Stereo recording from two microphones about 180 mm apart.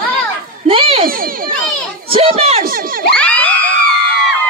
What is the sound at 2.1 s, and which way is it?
Speech, 30° right (ahead or behind).